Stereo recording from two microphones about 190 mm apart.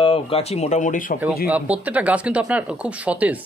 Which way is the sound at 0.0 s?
30° left (ahead or behind).